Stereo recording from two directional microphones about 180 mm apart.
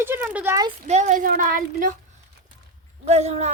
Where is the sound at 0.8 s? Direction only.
40° right (ahead or behind).